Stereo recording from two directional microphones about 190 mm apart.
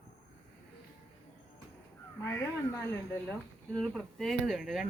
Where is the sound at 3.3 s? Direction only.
5° left (ahead or behind).